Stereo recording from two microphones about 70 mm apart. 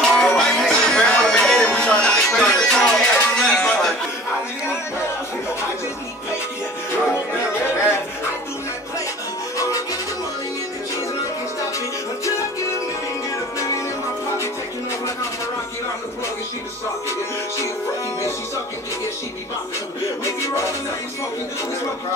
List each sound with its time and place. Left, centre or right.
0.0 s music: centre
9.6 s music: left
20.2 s music: left